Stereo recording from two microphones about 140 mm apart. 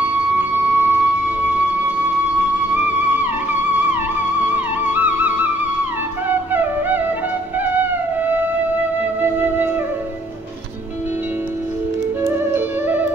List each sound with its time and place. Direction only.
0.0 s music: 15° right (ahead or behind)
6.2 s flute: 15° right (ahead or behind)
7.6 s music: 15° right (ahead or behind)
12.2 s music: 15° right (ahead or behind)